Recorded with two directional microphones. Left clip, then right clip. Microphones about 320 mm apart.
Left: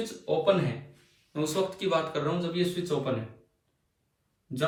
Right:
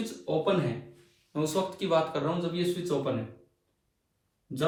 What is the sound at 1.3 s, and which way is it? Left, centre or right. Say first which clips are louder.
A man's voice: even; centre.